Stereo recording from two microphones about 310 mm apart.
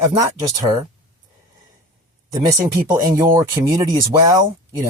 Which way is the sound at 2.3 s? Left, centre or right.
Centre.